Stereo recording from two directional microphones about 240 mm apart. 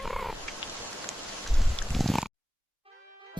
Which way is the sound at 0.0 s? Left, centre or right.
Centre.